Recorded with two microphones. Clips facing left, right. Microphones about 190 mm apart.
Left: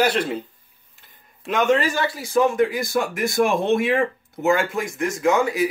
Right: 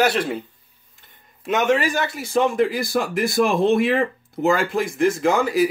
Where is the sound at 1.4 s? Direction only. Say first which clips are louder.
Even; 5° right (ahead or behind); by 5.3 s 30° right (ahead or behind).